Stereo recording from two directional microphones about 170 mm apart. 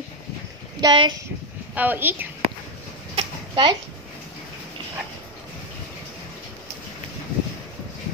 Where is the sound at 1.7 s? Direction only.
10° right (ahead or behind).